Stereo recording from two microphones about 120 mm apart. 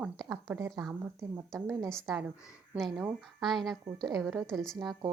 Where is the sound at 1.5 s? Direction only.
5° left (ahead or behind).